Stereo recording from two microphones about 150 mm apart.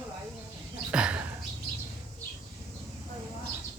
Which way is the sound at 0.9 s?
5° right (ahead or behind).